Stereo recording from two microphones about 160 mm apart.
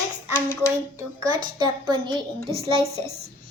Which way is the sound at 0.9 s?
25° right (ahead or behind).